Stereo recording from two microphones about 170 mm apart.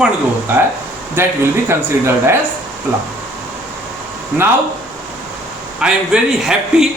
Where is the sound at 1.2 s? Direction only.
10° right (ahead or behind).